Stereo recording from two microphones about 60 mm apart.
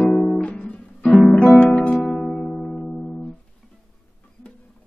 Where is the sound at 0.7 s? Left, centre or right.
Centre.